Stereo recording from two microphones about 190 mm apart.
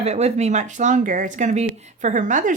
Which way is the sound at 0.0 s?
35° right (ahead or behind).